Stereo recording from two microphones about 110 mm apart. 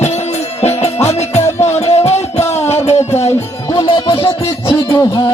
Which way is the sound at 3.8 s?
55° left (ahead or behind).